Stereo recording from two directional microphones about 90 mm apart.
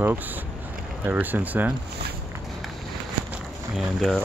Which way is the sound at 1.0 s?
20° right (ahead or behind).